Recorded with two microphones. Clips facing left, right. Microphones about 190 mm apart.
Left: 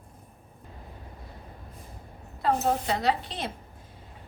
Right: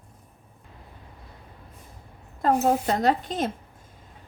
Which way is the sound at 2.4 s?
45° right (ahead or behind).